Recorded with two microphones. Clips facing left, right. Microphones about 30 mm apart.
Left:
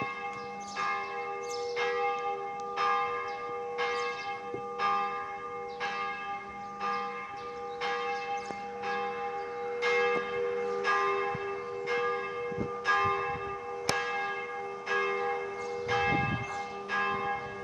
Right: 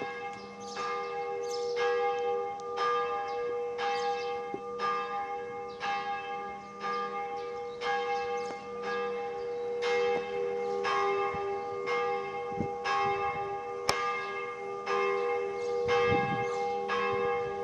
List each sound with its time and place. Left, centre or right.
0.7 s church bell: centre
7.8 s church bell: centre
10.4 s church bell: left
10.8 s church bell: centre
11.1 s church bell: centre